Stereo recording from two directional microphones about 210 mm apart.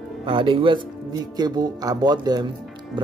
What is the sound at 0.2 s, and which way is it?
Speech, 25° right (ahead or behind).